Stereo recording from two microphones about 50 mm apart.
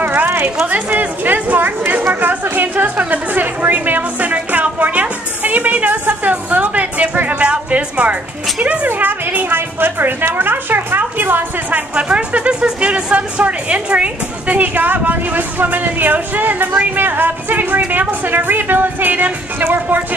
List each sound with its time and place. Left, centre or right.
0.0 s a sound: right
0.7 s speech: right
2.5 s music: right
8.8 s speech: right
11.7 s speech: right